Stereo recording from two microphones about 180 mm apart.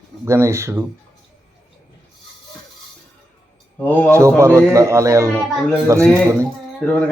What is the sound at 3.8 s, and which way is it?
Speech, 10° left (ahead or behind).